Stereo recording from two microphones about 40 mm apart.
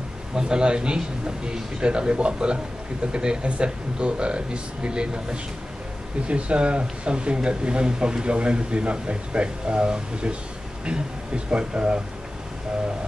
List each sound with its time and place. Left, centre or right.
0.4 s speech: right